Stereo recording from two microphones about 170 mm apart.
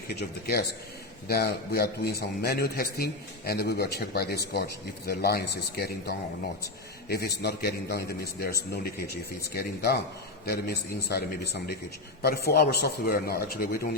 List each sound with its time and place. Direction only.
0.1 s a man's voice: 65° left (ahead or behind)